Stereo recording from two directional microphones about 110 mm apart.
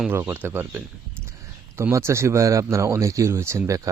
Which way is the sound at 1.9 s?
25° right (ahead or behind).